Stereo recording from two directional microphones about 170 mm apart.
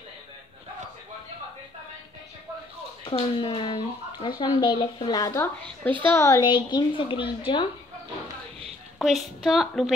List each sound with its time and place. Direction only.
3.1 s a woman's voice: 30° left (ahead or behind)
6.5 s a woman's voice: 30° left (ahead or behind)
8.9 s a woman's voice: centre (ahead or behind)